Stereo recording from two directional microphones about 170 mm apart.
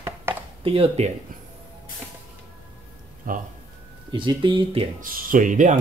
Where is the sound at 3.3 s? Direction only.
55° right (ahead or behind).